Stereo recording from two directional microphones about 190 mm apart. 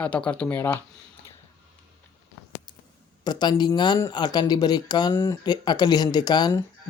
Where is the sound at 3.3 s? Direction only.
25° left (ahead or behind).